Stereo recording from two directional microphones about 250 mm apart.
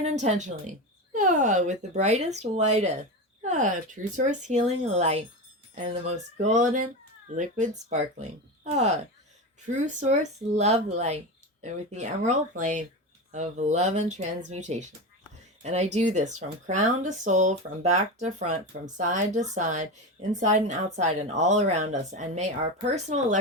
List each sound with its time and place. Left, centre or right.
0.0 s speech: right